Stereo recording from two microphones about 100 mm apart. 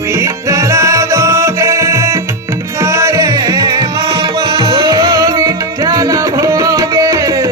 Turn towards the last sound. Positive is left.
turn(degrees=-35)  # may be behind; listen again after turning